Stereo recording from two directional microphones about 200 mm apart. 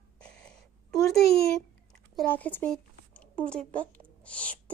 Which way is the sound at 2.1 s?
5° left (ahead or behind).